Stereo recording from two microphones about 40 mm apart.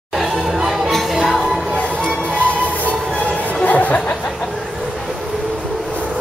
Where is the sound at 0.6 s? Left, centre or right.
Centre.